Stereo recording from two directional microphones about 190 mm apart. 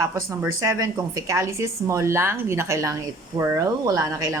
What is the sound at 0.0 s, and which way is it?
A woman's voice, 15° right (ahead or behind).